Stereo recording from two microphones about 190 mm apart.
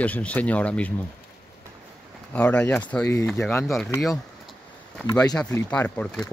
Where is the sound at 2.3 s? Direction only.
5° left (ahead or behind).